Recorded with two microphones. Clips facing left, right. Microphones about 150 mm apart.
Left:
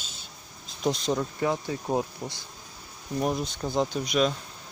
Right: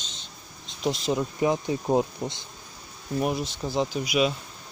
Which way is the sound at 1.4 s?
15° right (ahead or behind).